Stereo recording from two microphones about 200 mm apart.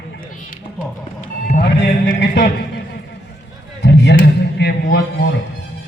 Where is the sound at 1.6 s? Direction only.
50° left (ahead or behind).